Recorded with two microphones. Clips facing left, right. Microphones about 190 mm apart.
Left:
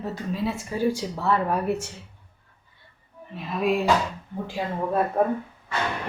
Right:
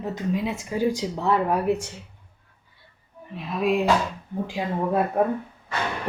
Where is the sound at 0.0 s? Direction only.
15° right (ahead or behind).